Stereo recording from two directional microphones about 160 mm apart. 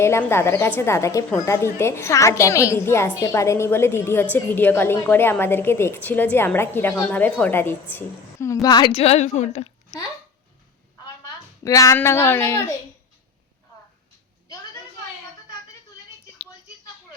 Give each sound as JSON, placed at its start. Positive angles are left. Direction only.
{"t": 0.0, "sound": "a woman's voice", "side_deg": 15}
{"t": 8.6, "sound": "a woman's voice", "side_deg": 25}
{"t": 8.9, "sound": "a woman's voice", "side_deg": 40}
{"t": 11.0, "sound": "a sound", "side_deg": 20}
{"t": 11.9, "sound": "a woman's voice", "side_deg": 15}